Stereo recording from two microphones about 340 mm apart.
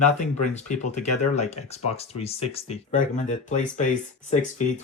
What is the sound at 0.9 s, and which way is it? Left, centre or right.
Speech, centre.